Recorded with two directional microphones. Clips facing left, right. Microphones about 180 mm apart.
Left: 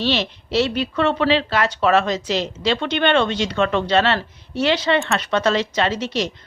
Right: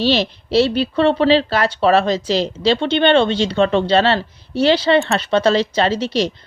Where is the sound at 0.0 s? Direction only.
35° right (ahead or behind).